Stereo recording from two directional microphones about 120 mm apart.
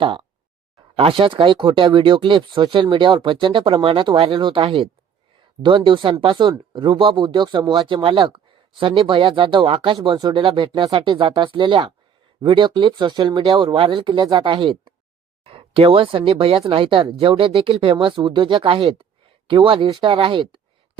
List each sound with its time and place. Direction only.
0.0 s speech: 45° right (ahead or behind)
15.4 s speech: 50° right (ahead or behind)